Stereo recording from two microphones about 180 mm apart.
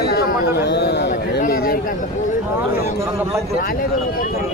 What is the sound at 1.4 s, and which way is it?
Speech, 55° left (ahead or behind).